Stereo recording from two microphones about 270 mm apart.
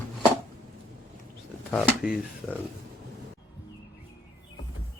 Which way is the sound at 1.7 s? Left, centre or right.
Centre.